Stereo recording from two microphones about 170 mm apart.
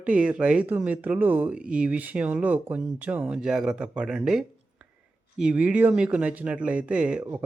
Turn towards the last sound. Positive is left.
turn(degrees=-5)  # may be behind; listen again after turning